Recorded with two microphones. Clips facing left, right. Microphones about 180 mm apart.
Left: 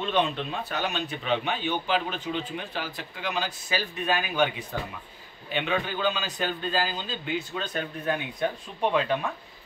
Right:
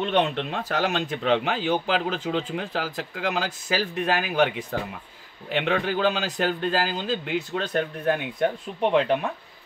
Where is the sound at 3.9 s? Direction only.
75° right (ahead or behind).